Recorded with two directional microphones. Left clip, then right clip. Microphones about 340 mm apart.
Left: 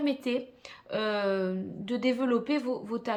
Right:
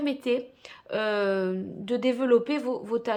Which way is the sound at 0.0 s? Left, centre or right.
Centre.